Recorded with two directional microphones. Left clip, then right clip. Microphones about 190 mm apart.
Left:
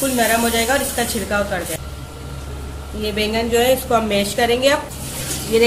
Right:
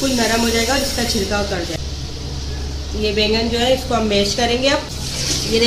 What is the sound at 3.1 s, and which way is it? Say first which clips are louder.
A woman's voice: left 1 dB; 50° left (ahead or behind).